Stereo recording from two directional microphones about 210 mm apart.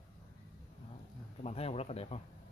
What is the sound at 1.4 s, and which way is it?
Speech, 30° left (ahead or behind).